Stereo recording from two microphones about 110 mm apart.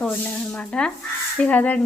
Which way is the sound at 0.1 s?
10° left (ahead or behind).